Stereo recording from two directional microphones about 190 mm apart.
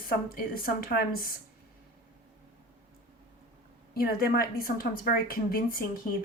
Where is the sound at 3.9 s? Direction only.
50° left (ahead or behind).